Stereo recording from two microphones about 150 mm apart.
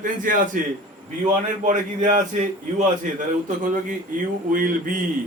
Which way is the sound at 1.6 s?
55° right (ahead or behind).